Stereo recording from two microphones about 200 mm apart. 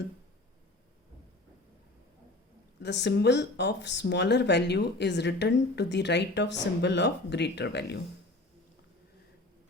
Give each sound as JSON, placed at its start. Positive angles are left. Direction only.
{"t": 2.8, "sound": "speech", "side_deg": 60}